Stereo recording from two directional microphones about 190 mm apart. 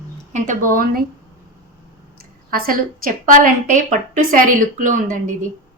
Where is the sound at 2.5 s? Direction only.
50° right (ahead or behind).